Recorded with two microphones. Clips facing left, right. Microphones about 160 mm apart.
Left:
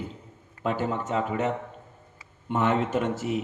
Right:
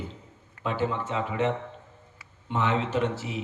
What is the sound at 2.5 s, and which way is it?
Speech, 50° left (ahead or behind).